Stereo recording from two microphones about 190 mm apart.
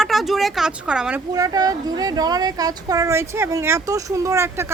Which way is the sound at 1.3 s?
20° right (ahead or behind).